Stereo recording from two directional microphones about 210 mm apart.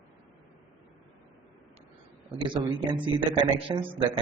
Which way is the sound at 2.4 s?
20° right (ahead or behind).